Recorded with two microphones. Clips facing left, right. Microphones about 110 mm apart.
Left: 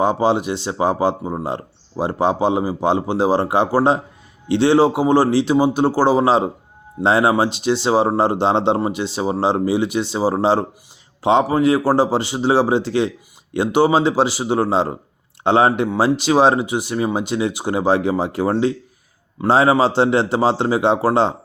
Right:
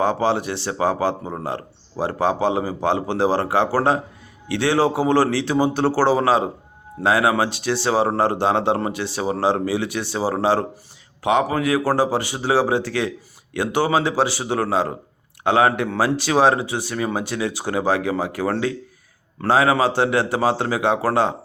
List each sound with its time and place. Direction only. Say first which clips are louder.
0.0 s speech: left 3 dB; 20° left (ahead or behind)